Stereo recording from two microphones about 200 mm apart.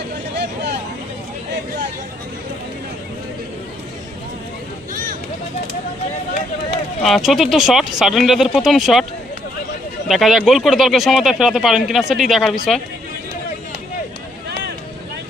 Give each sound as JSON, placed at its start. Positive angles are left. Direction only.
{"t": 0.3, "sound": "a sound", "side_deg": -55}
{"t": 7.0, "sound": "speech", "side_deg": 0}
{"t": 10.1, "sound": "speech", "side_deg": 0}